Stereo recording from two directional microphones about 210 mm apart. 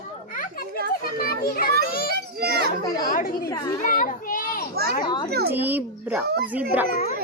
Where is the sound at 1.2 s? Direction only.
45° left (ahead or behind).